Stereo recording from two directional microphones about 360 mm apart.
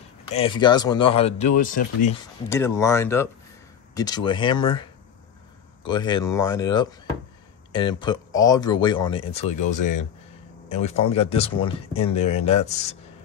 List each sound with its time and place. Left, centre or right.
0.3 s speech: centre
2.5 s speech: centre
5.9 s speech: centre